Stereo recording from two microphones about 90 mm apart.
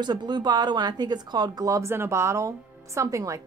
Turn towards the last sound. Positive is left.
turn(degrees=-35)  # may be behind; listen again after turning